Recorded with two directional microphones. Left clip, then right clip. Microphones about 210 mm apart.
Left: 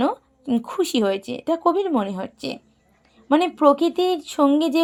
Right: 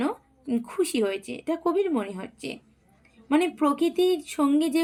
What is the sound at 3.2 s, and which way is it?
Speech, 35° left (ahead or behind).